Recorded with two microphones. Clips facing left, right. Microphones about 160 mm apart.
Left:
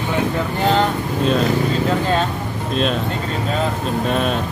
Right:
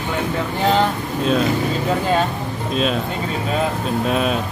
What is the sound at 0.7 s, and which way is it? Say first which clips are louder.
Speech: left 1 dB; centre (ahead or behind).